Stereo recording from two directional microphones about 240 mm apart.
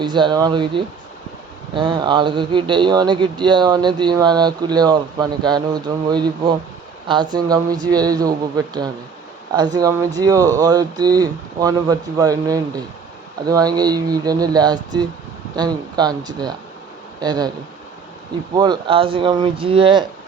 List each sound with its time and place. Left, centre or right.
0.0 s speech: centre
18.5 s speech: centre